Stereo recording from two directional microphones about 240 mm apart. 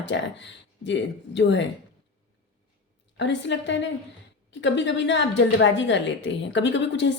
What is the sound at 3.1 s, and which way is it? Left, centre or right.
A woman's voice, left.